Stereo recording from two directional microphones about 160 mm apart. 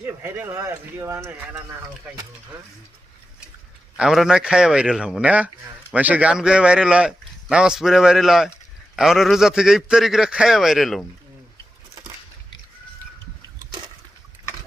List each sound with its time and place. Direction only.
0.0 s speech: 15° right (ahead or behind)
3.9 s speech: 5° right (ahead or behind)